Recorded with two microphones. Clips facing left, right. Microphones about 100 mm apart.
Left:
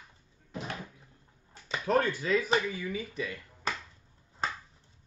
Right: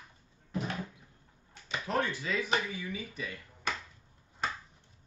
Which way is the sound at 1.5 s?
40° left (ahead or behind).